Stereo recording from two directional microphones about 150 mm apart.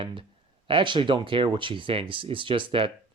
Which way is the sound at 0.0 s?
35° right (ahead or behind).